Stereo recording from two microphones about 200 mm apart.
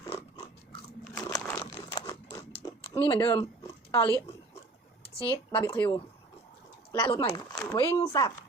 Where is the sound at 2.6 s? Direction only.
20° left (ahead or behind).